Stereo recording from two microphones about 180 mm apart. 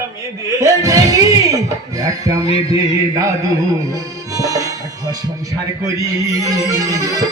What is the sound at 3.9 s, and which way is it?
Music, 20° right (ahead or behind).